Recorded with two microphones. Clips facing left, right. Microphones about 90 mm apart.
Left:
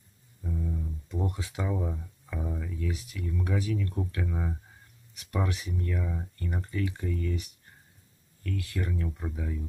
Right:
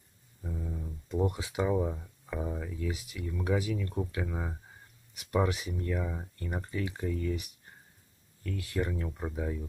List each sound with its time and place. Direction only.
0.4 s speech: 15° right (ahead or behind)
8.5 s speech: 20° right (ahead or behind)